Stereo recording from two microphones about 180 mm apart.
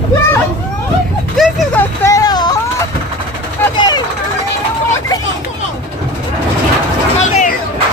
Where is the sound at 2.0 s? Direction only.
20° left (ahead or behind).